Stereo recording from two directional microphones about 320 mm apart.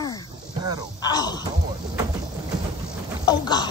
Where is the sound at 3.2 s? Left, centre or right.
Centre.